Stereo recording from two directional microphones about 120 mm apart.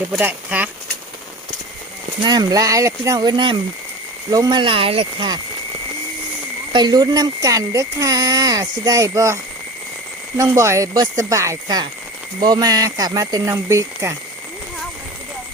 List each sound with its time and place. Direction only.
0.2 s speech: 15° right (ahead or behind)
2.2 s speech: 35° right (ahead or behind)
6.7 s speech: 35° right (ahead or behind)